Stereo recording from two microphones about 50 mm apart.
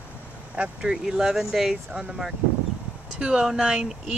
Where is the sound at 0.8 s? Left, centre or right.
Centre.